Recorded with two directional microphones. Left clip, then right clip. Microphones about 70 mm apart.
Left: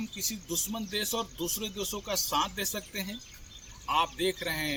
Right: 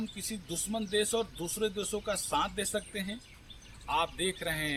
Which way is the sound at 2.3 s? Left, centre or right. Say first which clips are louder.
Even; right.